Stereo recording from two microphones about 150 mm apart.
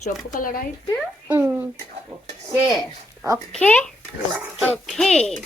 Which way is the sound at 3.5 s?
10° left (ahead or behind).